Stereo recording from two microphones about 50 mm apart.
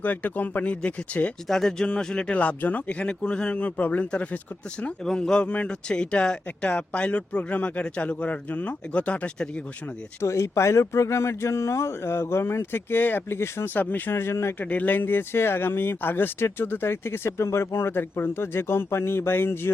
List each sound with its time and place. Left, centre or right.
0.0 s speech: left
1.5 s speech: centre
2.3 s a man's voice: left
5.0 s a man's voice: centre
10.2 s speech: left
12.7 s speech: left
13.7 s speech: left
14.1 s speech: left
14.6 s speech: left
17.3 s speech: left